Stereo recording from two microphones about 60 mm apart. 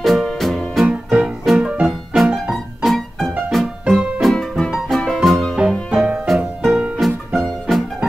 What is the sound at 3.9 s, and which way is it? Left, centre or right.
Music, centre.